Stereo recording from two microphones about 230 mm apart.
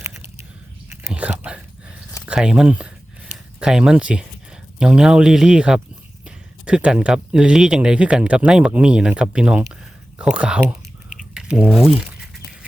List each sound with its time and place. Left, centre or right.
0.0 s biting: centre
2.2 s speech: centre
11.3 s a sound: centre